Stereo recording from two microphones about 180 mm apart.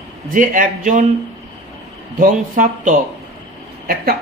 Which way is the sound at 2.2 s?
45° right (ahead or behind).